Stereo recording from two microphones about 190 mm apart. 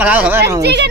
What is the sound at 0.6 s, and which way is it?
Speech, 65° right (ahead or behind).